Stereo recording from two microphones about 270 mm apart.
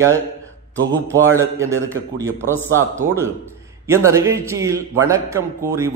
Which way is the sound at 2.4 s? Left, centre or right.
Centre.